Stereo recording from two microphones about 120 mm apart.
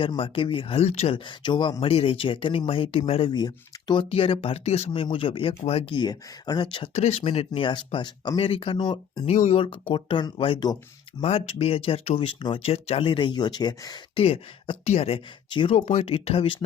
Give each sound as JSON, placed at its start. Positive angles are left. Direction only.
{"t": 0.2, "sound": "speech", "side_deg": 45}
{"t": 1.1, "sound": "speech", "side_deg": 40}
{"t": 3.3, "sound": "speech", "side_deg": 35}
{"t": 4.1, "sound": "speech", "side_deg": 50}
{"t": 4.9, "sound": "speech", "side_deg": 45}
{"t": 6.9, "sound": "speech", "side_deg": 60}
{"t": 9.2, "sound": "speech", "side_deg": 70}
{"t": 9.6, "sound": "speech", "side_deg": 50}
{"t": 14.2, "sound": "speech", "side_deg": 55}
{"t": 15.7, "sound": "speech", "side_deg": 60}